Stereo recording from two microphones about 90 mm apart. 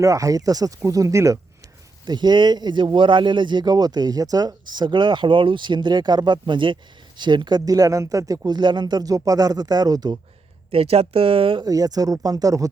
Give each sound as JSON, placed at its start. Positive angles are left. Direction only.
{"t": 0.0, "sound": "speech", "side_deg": -40}
{"t": 2.0, "sound": "speech", "side_deg": -50}
{"t": 10.7, "sound": "speech", "side_deg": -90}
{"t": 11.6, "sound": "speech", "side_deg": -45}